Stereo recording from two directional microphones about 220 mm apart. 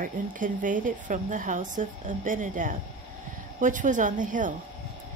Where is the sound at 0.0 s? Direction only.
35° right (ahead or behind).